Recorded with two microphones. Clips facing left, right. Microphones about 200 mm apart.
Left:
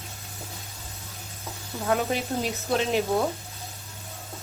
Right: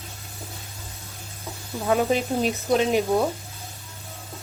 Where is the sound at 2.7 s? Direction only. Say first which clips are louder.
Right 3 dB; 15° right (ahead or behind).